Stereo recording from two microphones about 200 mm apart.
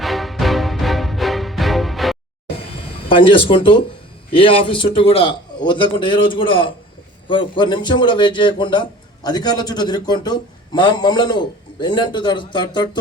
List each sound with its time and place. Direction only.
0.0 s music: centre (ahead or behind)
3.1 s a man's voice: 25° left (ahead or behind)